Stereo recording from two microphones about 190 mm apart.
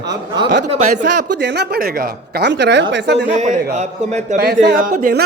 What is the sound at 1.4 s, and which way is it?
A man's voice, 60° right (ahead or behind).